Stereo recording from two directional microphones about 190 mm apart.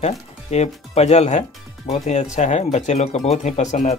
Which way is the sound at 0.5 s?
35° left (ahead or behind).